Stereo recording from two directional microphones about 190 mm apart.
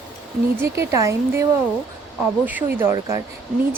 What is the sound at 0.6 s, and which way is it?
Speech, 15° right (ahead or behind).